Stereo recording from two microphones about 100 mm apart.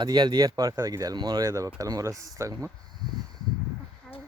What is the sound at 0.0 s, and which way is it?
Speech, 45° right (ahead or behind).